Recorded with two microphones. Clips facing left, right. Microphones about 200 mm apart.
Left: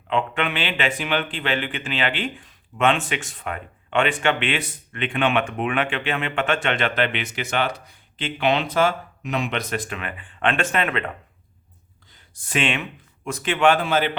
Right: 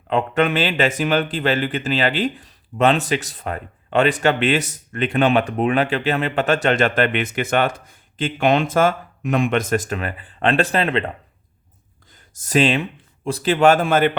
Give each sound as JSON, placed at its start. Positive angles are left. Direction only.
{"t": 0.1, "sound": "speech", "side_deg": -40}
{"t": 12.3, "sound": "speech", "side_deg": -40}